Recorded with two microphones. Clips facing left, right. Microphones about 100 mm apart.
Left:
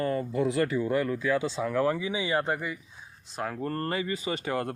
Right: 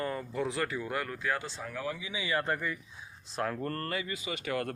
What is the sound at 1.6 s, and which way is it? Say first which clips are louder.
Speech: left 12 dB; 90° left.